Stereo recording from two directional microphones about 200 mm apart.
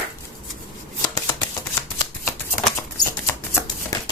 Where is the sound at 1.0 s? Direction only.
15° left (ahead or behind).